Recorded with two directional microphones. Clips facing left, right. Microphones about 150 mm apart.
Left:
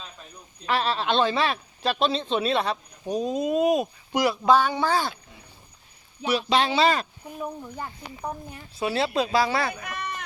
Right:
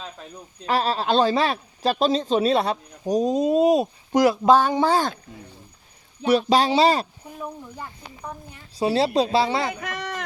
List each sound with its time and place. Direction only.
0.6 s speech: 35° right (ahead or behind)
4.8 s speech: 20° right (ahead or behind)
6.3 s speech: 40° right (ahead or behind)
8.8 s speech: 30° right (ahead or behind)
9.8 s a sound: 90° right